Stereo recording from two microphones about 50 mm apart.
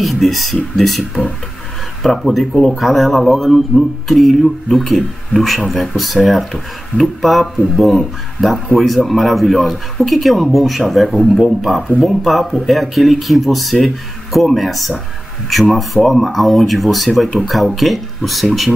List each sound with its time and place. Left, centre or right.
0.0 s speech: centre